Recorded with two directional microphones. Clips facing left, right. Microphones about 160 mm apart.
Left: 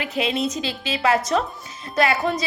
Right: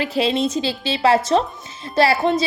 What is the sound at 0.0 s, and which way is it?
A woman's voice, 30° right (ahead or behind).